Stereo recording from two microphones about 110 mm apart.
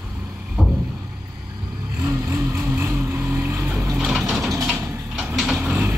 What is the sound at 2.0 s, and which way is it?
Vehicle, 30° right (ahead or behind).